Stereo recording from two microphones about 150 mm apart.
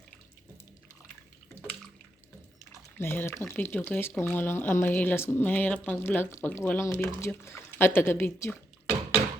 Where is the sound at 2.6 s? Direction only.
15° left (ahead or behind).